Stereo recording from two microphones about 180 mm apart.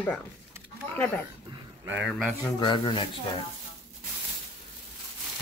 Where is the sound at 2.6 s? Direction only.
25° left (ahead or behind).